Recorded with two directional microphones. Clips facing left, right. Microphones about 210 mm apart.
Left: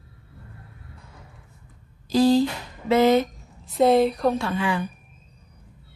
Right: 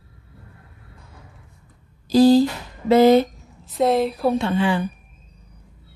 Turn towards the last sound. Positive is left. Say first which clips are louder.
# right 5 dB
turn(degrees=-30)  # may be behind; listen again after turning